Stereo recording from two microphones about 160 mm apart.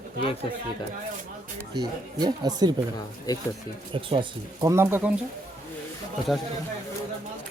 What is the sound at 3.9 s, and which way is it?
Speech, 30° right (ahead or behind).